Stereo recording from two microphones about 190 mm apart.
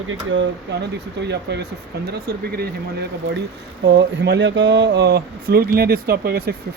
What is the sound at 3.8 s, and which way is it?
Speech, 70° right (ahead or behind).